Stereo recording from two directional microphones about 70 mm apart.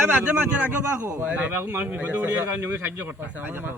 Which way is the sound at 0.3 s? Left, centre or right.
Right.